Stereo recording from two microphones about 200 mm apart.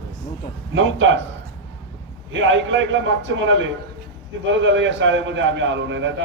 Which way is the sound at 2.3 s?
70° right (ahead or behind).